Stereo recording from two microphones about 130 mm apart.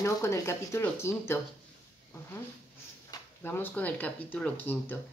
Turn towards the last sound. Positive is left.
turn(degrees=15)  # may be behind; listen again after turning